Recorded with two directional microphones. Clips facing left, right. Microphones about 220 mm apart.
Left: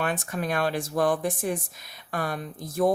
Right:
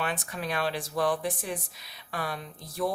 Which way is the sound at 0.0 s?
50° left (ahead or behind).